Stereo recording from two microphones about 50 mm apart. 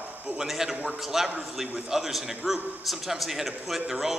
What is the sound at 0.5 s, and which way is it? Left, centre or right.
A woman's voice, centre.